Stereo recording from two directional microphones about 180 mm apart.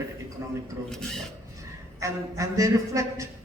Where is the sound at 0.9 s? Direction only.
5° left (ahead or behind).